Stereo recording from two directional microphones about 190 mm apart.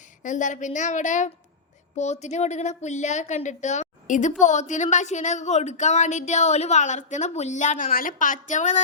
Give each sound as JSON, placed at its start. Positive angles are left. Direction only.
{"t": 0.2, "sound": "a woman's voice", "side_deg": 40}